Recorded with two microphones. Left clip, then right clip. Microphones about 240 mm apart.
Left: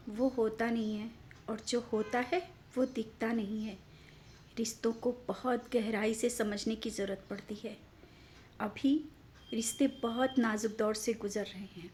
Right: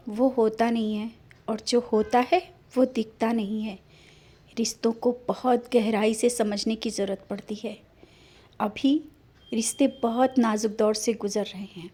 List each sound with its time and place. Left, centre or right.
0.1 s a woman's voice: right